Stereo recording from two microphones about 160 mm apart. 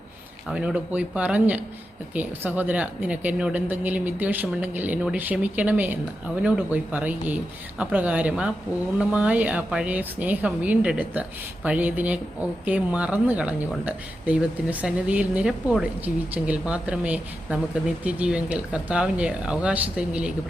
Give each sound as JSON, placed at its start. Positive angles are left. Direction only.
{"t": 0.4, "sound": "speech", "side_deg": -5}